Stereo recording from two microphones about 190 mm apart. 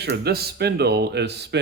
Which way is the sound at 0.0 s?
60° right (ahead or behind).